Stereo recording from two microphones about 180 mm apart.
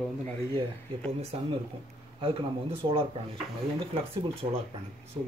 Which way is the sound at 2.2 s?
30° right (ahead or behind).